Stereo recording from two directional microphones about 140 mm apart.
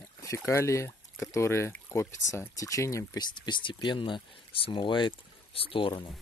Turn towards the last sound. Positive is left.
turn(degrees=40)  # may be behind; listen again after turning